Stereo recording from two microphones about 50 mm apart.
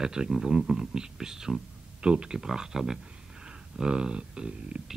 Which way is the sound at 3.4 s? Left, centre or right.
Centre.